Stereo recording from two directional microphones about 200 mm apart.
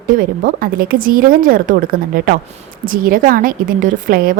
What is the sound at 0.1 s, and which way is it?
A woman's voice, 45° right (ahead or behind).